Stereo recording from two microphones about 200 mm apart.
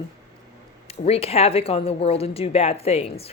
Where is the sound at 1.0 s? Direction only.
30° left (ahead or behind).